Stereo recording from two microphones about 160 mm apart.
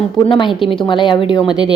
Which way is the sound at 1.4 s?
5° right (ahead or behind).